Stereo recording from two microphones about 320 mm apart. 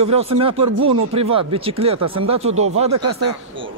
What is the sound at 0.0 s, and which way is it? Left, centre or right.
Speech, centre.